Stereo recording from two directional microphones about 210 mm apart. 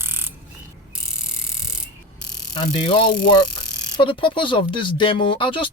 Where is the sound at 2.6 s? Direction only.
25° left (ahead or behind).